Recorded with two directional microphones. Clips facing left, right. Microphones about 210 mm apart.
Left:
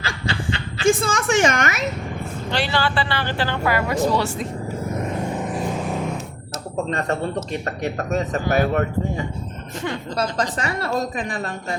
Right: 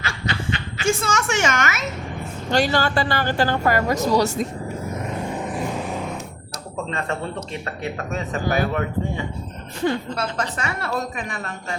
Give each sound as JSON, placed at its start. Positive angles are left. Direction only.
{"t": 0.0, "sound": "train", "side_deg": 30}
{"t": 0.8, "sound": "a woman's voice", "side_deg": 35}
{"t": 2.5, "sound": "speech", "side_deg": -45}
{"t": 7.6, "sound": "a woman's voice", "side_deg": 45}